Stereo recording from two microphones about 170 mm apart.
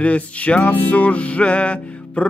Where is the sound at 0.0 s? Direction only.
5° left (ahead or behind).